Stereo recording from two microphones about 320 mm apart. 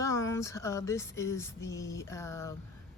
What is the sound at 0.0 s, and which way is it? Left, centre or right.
Speech, centre.